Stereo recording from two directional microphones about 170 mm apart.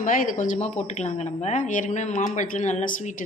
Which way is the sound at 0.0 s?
50° left (ahead or behind).